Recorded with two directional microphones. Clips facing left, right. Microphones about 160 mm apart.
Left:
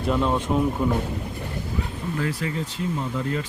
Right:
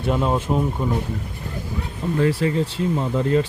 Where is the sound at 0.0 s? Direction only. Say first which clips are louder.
Right 1 dB; 5° right (ahead or behind).